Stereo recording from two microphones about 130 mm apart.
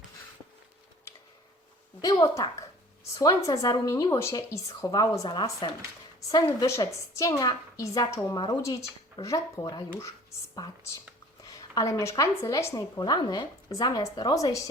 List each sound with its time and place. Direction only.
2.0 s a woman's voice: 25° left (ahead or behind)
11.4 s a woman's voice: 25° left (ahead or behind)